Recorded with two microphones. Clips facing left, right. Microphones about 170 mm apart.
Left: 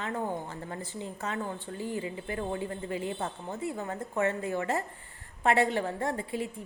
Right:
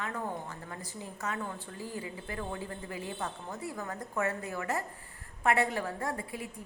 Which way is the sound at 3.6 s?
20° left (ahead or behind).